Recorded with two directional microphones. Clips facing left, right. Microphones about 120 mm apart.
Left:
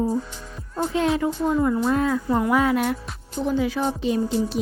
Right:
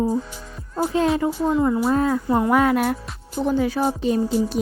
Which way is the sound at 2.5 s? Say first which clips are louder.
Right 2 dB; 55° right (ahead or behind).